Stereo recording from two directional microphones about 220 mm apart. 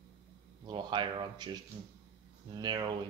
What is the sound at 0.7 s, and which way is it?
Speech, 20° right (ahead or behind).